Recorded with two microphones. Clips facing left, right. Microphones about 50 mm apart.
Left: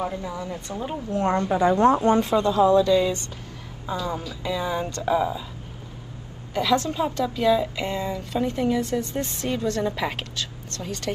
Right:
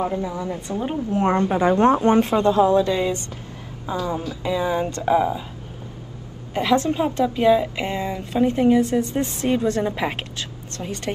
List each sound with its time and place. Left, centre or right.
0.0 s a woman's voice: right
4.4 s a woman's voice: right
6.5 s a woman's voice: right